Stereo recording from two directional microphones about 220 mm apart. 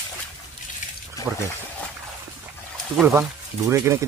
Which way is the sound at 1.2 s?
15° left (ahead or behind).